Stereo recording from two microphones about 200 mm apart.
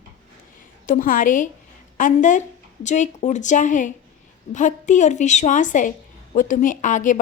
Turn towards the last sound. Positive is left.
turn(degrees=40)  # may be behind; listen again after turning